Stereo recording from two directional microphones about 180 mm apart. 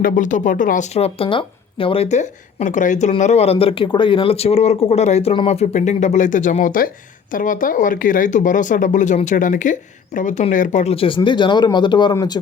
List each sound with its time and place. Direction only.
0.0 s speech: 45° left (ahead or behind); by 12.4 s 20° left (ahead or behind)